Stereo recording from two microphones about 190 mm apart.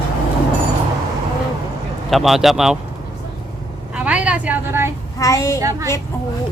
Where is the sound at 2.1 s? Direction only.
Centre (ahead or behind).